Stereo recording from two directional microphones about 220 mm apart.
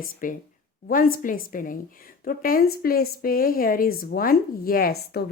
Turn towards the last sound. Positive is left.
turn(degrees=40)  # may be behind; listen again after turning